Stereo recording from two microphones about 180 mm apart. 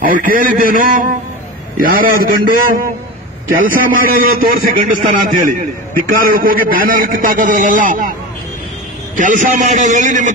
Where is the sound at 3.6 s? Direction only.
50° right (ahead or behind).